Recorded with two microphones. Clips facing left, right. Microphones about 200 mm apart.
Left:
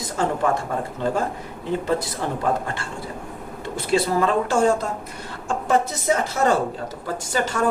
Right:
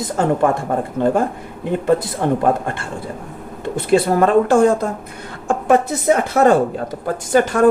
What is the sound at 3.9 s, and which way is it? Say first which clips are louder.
Speech: right 6 dB; 55° right (ahead or behind).